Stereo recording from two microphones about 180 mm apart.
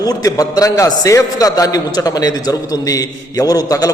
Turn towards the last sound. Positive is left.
turn(degrees=20)  # may be behind; listen again after turning